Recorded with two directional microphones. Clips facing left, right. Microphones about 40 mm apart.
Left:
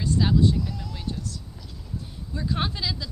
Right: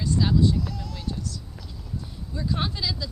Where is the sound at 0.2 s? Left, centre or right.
Centre.